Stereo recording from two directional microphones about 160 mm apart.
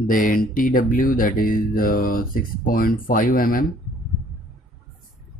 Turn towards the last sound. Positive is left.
turn(degrees=60)  # may be behind; listen again after turning